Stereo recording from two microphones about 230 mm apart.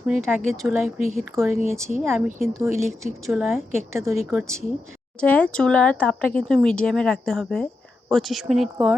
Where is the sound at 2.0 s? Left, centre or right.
Centre.